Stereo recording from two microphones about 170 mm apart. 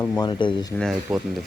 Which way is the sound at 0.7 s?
5° left (ahead or behind).